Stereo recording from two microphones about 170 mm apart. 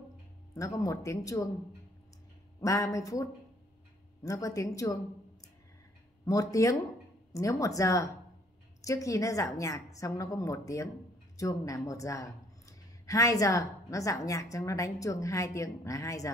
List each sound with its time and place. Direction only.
0.6 s speech: 20° left (ahead or behind)
2.6 s speech: 20° left (ahead or behind)
6.2 s speech: 20° left (ahead or behind)